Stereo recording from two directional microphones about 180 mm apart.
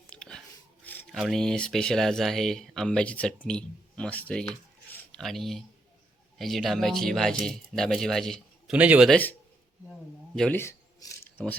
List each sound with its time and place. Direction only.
0.1 s whispering: 5° left (ahead or behind)
1.1 s speech: centre (ahead or behind)
4.9 s a sound: 5° left (ahead or behind)
6.4 s speech: centre (ahead or behind)
9.0 s a man's voice: 10° left (ahead or behind)
10.3 s speech: 5° left (ahead or behind)